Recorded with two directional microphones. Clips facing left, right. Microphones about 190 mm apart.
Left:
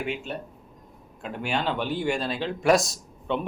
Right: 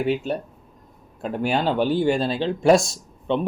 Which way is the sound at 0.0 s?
35° right (ahead or behind).